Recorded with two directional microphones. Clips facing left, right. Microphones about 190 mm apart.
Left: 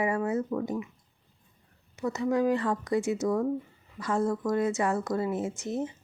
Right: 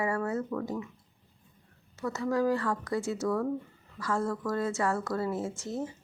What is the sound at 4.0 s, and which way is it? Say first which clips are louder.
Speech: left 3 dB; 20° left (ahead or behind).